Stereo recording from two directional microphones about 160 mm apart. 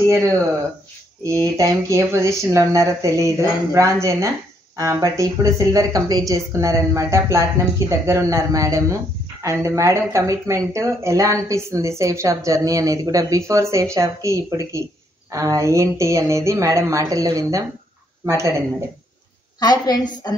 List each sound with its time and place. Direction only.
0.0 s speech: 15° right (ahead or behind)
19.6 s a woman's voice: 25° left (ahead or behind)